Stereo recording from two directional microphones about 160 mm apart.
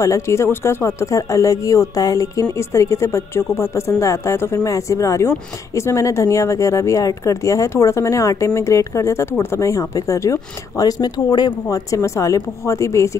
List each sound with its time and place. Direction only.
0.0 s speech: 20° left (ahead or behind)